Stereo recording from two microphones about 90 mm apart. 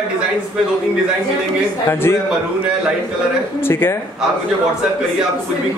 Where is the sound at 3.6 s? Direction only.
25° left (ahead or behind).